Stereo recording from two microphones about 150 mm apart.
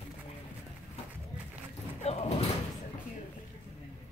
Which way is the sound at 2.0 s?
45° left (ahead or behind).